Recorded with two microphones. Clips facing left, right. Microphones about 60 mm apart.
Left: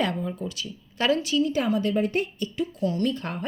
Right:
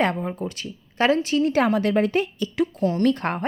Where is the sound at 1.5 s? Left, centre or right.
Right.